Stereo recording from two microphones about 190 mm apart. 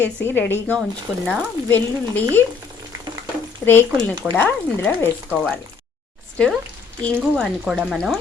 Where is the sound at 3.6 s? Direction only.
Centre (ahead or behind).